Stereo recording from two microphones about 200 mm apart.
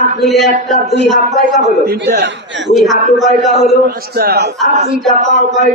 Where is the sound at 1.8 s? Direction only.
55° right (ahead or behind).